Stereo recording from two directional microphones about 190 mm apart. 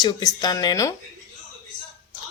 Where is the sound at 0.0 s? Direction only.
20° left (ahead or behind).